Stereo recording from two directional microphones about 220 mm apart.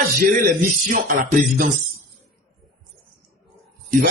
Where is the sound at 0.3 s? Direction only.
40° right (ahead or behind).